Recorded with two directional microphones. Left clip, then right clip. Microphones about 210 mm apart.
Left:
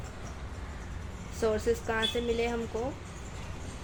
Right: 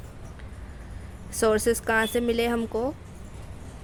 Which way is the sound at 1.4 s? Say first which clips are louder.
Right 6 dB; 40° right (ahead or behind).